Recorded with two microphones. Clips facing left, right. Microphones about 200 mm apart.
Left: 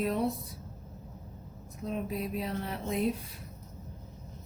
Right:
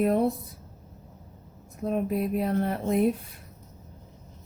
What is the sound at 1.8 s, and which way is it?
Speech, 55° right (ahead or behind).